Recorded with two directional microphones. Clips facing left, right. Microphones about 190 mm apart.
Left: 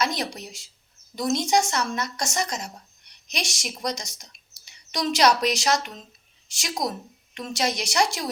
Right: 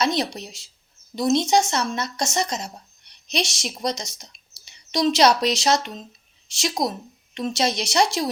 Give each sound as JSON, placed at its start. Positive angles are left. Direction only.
{"t": 0.0, "sound": "a woman's voice", "side_deg": -25}